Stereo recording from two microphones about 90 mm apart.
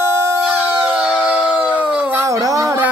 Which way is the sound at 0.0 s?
30° right (ahead or behind).